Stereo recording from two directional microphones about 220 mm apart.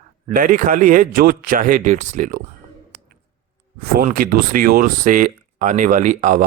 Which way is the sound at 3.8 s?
45° right (ahead or behind).